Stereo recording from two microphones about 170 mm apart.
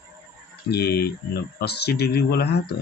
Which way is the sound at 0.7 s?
70° left (ahead or behind).